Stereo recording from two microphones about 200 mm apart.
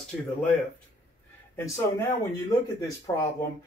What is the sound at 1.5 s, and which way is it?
Speech, 15° left (ahead or behind).